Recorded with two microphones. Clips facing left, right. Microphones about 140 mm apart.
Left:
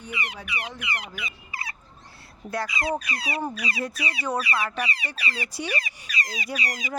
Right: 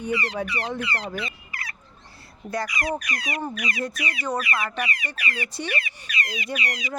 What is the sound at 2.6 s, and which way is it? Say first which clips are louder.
Speech: even; 25° left (ahead or behind).